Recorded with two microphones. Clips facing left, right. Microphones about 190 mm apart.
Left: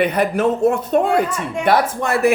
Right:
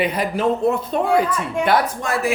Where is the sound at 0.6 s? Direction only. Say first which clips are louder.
Left 3 dB; 45° left (ahead or behind).